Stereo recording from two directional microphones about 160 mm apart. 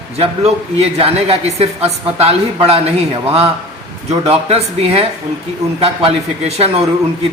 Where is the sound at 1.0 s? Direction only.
40° right (ahead or behind).